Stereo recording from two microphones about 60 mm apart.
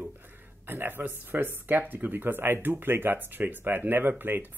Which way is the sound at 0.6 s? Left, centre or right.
Right.